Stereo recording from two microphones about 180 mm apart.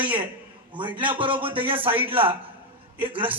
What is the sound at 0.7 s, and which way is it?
A man's voice, 25° right (ahead or behind).